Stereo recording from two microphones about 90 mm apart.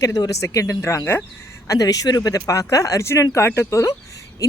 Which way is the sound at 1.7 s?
40° left (ahead or behind).